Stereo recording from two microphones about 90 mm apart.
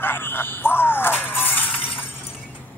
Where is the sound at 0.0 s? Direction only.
25° left (ahead or behind).